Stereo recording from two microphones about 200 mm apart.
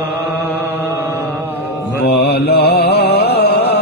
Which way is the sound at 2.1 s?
55° left (ahead or behind).